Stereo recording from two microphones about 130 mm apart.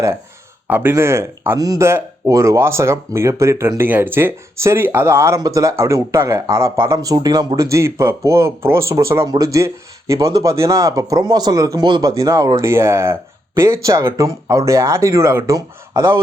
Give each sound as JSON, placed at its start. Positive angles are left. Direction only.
{"t": 0.7, "sound": "speech", "side_deg": -15}